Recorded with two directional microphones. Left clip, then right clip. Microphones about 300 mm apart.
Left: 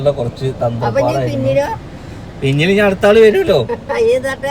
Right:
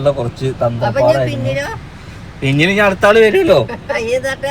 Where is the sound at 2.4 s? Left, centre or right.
Right.